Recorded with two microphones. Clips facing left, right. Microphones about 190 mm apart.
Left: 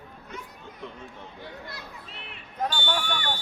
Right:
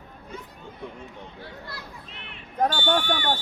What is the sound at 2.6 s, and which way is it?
Basketball bounce, 55° right (ahead or behind).